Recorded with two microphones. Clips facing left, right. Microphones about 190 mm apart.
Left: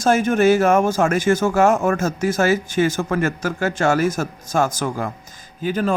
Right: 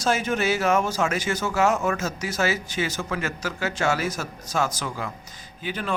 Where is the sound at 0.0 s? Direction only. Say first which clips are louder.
Left 8 dB; 50° left (ahead or behind).